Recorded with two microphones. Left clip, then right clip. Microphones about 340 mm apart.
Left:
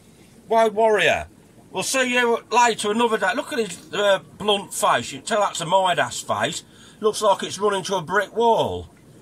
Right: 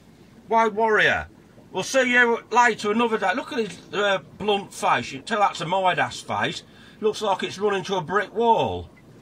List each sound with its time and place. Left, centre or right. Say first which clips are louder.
0.5 s speech: left 2 dB; centre